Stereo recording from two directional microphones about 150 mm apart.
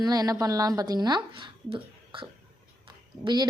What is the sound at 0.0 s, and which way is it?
A woman's voice, 25° right (ahead or behind).